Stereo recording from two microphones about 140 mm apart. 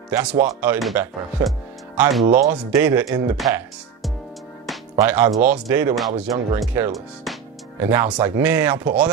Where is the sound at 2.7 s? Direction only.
15° right (ahead or behind).